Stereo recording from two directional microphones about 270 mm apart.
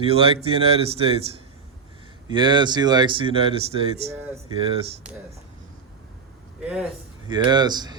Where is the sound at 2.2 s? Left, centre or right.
Centre.